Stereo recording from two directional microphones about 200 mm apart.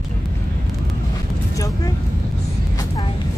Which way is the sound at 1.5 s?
15° left (ahead or behind).